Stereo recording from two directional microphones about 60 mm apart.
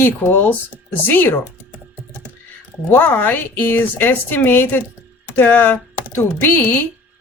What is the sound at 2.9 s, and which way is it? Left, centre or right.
Speech, left.